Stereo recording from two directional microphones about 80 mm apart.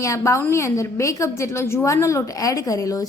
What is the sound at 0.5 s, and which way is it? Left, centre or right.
A woman's voice, left.